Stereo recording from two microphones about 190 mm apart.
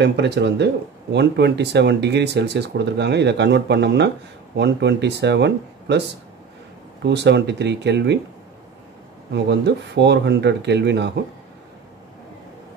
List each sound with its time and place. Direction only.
0.0 s speech: 65° right (ahead or behind)
9.3 s speech: 65° right (ahead or behind)